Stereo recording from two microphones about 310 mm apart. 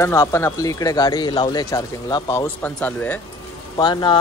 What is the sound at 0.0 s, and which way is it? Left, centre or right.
Speech, centre.